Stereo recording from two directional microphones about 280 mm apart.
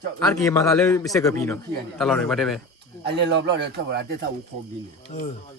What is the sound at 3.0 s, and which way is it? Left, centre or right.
A man's voice, right.